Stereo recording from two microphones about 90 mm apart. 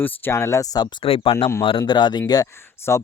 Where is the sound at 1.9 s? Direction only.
55° left (ahead or behind).